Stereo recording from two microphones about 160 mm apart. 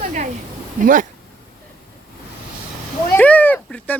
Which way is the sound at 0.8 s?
55° right (ahead or behind).